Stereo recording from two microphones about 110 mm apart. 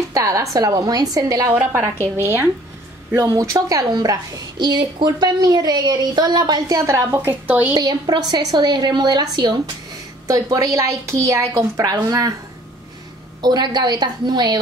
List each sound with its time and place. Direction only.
0.1 s a woman's voice: 30° right (ahead or behind)
1.5 s a woman's voice: 20° right (ahead or behind)
3.2 s a woman's voice: 30° right (ahead or behind)
7.1 s a woman's voice: 15° right (ahead or behind)
7.7 s a woman's voice: 40° right (ahead or behind)
13.4 s a woman's voice: 40° right (ahead or behind)